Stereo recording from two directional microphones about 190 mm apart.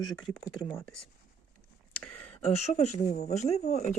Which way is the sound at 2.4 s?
35° left (ahead or behind).